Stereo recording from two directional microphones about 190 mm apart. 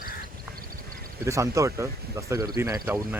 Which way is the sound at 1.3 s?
15° right (ahead or behind).